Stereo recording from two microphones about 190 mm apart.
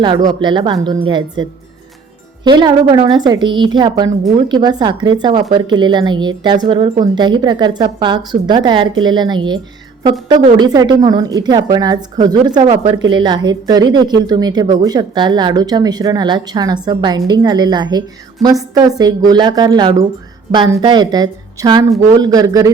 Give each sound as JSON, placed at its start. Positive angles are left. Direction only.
{"t": 0.3, "sound": "speech", "side_deg": -25}